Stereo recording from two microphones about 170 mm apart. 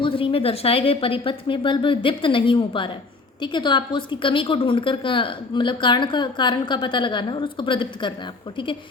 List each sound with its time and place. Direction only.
0.0 s a woman's voice: 30° left (ahead or behind)